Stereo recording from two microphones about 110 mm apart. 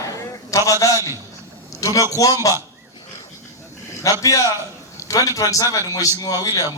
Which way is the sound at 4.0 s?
30° left (ahead or behind).